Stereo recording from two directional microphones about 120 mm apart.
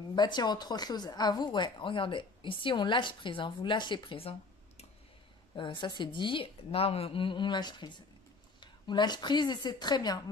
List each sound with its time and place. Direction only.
0.1 s speech: 40° left (ahead or behind); by 4.8 s 55° left (ahead or behind)
5.6 s a woman's voice: 40° left (ahead or behind)